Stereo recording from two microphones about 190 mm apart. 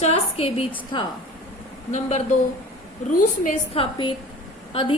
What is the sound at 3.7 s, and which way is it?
Speech, 30° left (ahead or behind).